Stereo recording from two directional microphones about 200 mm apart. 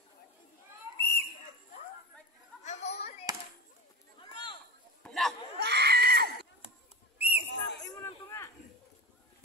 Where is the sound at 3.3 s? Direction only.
20° right (ahead or behind).